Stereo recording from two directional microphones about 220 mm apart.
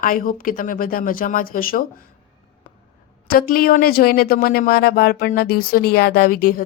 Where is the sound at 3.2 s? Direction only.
40° left (ahead or behind).